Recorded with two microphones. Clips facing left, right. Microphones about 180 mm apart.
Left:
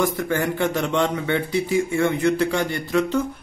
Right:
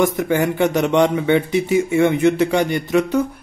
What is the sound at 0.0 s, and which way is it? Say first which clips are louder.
A man's voice: right 5 dB; 20° right (ahead or behind).